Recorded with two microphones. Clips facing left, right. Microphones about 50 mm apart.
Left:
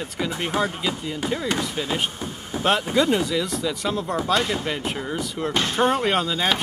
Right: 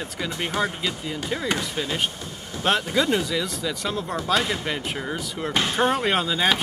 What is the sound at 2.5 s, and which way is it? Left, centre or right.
Vehicle, left.